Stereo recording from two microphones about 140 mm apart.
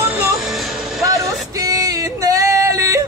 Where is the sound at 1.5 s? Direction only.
25° right (ahead or behind).